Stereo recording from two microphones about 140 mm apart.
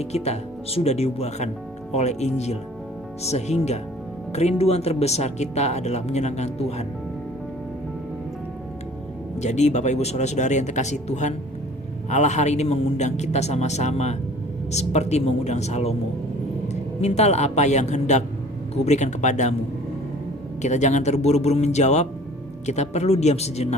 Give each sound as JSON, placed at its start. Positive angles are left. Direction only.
{"t": 0.0, "sound": "speech", "side_deg": 50}
{"t": 9.4, "sound": "a man's voice", "side_deg": 55}
{"t": 20.6, "sound": "speech", "side_deg": 55}